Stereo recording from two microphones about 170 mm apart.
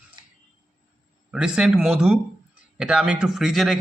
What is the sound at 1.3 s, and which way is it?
A man's voice, 5° right (ahead or behind).